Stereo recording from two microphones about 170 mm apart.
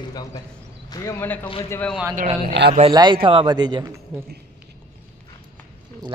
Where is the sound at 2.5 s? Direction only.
70° right (ahead or behind).